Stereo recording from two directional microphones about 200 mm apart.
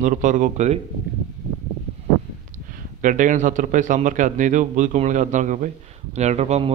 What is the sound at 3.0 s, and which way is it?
A man's voice, 40° right (ahead or behind).